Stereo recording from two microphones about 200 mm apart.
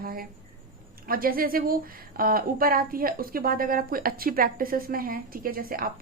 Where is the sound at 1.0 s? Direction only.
45° right (ahead or behind).